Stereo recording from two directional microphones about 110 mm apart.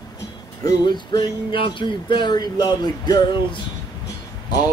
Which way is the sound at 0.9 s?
40° left (ahead or behind).